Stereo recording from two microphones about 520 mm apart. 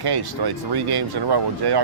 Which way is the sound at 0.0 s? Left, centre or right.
Right.